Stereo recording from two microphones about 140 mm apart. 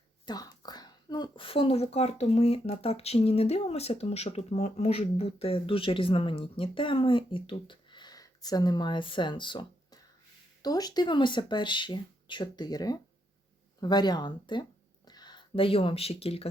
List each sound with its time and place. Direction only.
0.3 s a woman's voice: 30° left (ahead or behind); by 16.5 s 45° left (ahead or behind)